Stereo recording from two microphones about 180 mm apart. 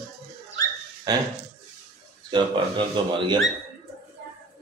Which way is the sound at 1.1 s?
20° right (ahead or behind).